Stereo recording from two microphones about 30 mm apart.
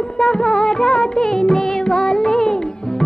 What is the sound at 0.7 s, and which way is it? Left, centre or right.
Music, left.